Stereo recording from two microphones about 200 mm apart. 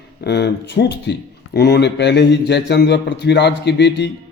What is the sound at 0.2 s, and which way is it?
A man's voice, 55° left (ahead or behind).